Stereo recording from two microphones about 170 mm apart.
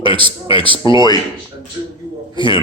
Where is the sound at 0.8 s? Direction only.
25° left (ahead or behind).